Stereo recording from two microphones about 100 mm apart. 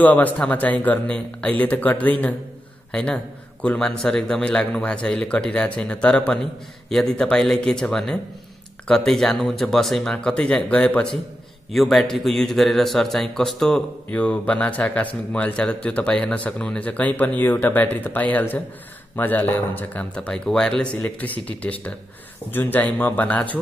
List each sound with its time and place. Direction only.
0.0 s a man's voice: 15° left (ahead or behind)
11.7 s speech: centre (ahead or behind)